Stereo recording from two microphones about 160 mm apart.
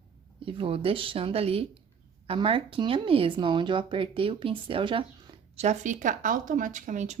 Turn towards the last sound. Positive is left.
turn(degrees=-45)  # may be behind; listen again after turning